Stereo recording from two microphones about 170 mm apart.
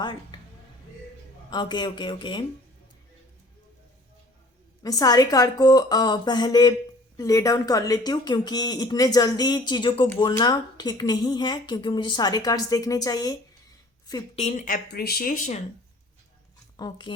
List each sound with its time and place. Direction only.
0.0 s speech: 25° left (ahead or behind)
1.5 s speech: 25° left (ahead or behind)
4.8 s speech: 20° left (ahead or behind)
14.3 s speech: 45° left (ahead or behind)
16.7 s speech: 25° left (ahead or behind)